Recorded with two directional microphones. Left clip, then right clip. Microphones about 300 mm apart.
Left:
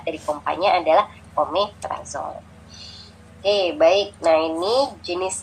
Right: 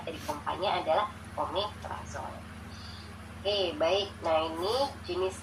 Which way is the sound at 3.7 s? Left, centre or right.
Left.